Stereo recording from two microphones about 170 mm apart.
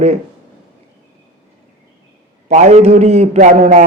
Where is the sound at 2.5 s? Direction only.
45° right (ahead or behind).